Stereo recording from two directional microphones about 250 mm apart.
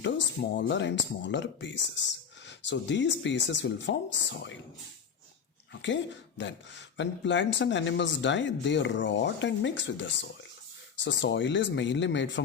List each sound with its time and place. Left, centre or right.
0.0 s speech: left
5.8 s speech: left